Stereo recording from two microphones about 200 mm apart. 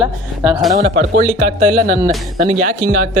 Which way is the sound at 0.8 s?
45° right (ahead or behind).